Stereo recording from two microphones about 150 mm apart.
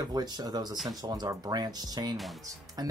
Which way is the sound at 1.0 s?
25° right (ahead or behind).